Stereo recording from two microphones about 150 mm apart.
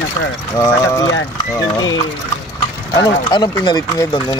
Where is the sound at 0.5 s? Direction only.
20° left (ahead or behind).